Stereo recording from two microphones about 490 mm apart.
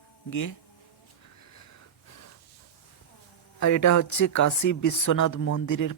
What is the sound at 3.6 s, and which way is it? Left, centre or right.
Speech, left.